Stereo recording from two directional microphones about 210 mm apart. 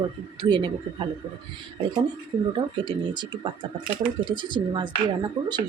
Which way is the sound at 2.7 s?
20° right (ahead or behind).